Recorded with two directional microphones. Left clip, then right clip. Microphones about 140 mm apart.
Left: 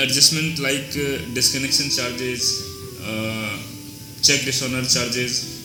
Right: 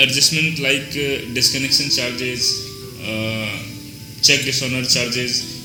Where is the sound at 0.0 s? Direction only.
40° left (ahead or behind).